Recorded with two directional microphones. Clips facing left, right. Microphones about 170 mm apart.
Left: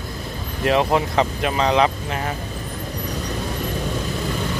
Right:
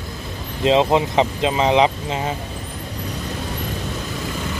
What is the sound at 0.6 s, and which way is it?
Speech, 20° right (ahead or behind).